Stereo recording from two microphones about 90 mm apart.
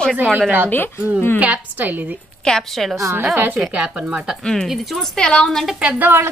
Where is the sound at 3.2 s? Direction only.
15° right (ahead or behind).